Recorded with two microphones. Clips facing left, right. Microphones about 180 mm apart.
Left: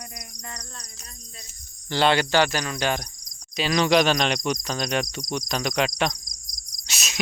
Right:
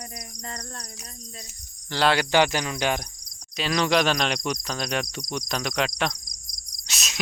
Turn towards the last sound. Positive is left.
turn(degrees=0)  # may be behind; listen again after turning